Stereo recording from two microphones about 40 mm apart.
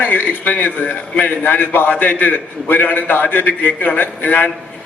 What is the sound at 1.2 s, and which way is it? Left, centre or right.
A man's voice, left.